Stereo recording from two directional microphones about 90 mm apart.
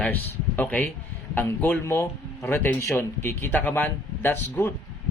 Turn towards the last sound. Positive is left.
turn(degrees=25)  # may be behind; listen again after turning